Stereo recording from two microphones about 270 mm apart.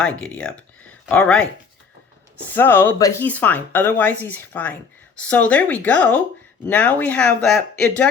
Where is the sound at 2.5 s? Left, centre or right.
Centre.